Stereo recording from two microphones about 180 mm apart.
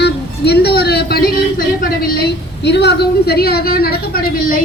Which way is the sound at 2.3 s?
70° left (ahead or behind).